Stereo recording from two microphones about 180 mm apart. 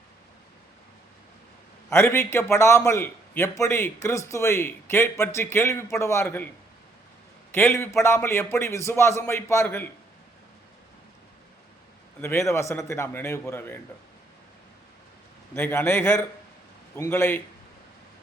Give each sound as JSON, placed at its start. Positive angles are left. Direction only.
{"t": 1.9, "sound": "a man's voice", "side_deg": 15}
{"t": 7.5, "sound": "a man's voice", "side_deg": 15}
{"t": 12.2, "sound": "a man's voice", "side_deg": 15}
{"t": 15.5, "sound": "a man's voice", "side_deg": 15}